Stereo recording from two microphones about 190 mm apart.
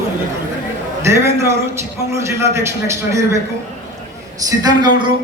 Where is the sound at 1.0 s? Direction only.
15° right (ahead or behind).